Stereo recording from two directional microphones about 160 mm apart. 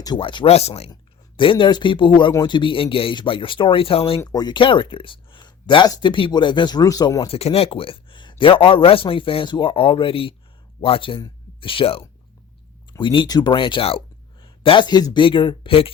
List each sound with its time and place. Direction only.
0.0 s speech: 30° left (ahead or behind)
4.2 s speech: 25° left (ahead or behind)
7.3 s speech: 40° left (ahead or behind)